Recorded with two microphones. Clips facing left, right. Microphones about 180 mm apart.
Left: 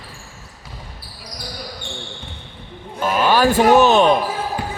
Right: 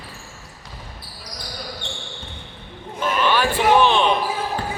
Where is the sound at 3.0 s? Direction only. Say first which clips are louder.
Left 4 dB; 40° left (ahead or behind).